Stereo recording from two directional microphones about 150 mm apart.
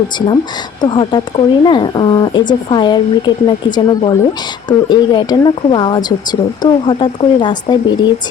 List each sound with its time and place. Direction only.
0.8 s speech: 30° left (ahead or behind)